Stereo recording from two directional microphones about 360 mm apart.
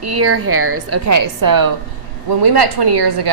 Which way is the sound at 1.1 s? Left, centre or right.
Right.